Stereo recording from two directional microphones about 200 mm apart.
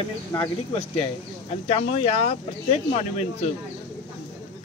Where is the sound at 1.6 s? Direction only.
30° left (ahead or behind).